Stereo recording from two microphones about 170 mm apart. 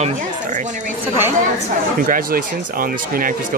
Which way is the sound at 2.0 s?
55° right (ahead or behind).